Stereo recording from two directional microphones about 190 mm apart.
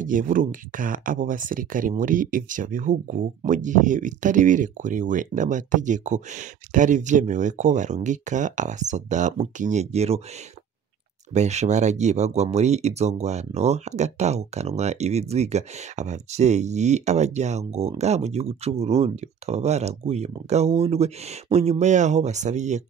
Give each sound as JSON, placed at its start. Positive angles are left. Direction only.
{"t": 0.0, "sound": "speech", "side_deg": -45}
{"t": 11.3, "sound": "speech", "side_deg": -35}